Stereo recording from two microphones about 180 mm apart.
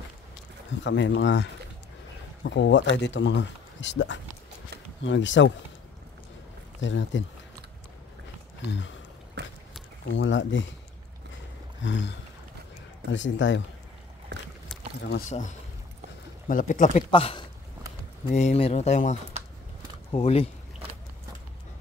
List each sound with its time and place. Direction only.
0.7 s speech: 85° left
6.8 s speech: 90° left
9.4 s a sound: 70° right (ahead or behind)
10.0 s speech: 90° left
11.8 s speech: 90° left
14.3 s boat: 70° right (ahead or behind)
15.0 s speech: 70° left (ahead or behind)
15.2 s speech: 45° left (ahead or behind)
17.1 s speech: 30° left (ahead or behind)